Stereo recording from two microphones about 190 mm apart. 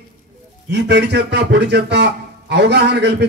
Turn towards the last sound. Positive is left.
turn(degrees=-65)  # may be behind; listen again after turning